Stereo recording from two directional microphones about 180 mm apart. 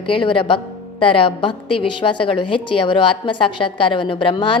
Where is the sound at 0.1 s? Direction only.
30° left (ahead or behind).